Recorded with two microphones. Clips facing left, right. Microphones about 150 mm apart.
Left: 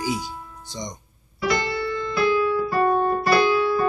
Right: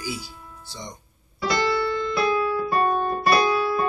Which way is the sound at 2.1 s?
25° right (ahead or behind).